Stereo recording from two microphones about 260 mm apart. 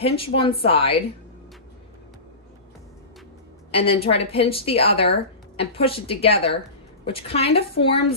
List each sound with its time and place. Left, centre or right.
0.0 s speech: left
3.7 s speech: left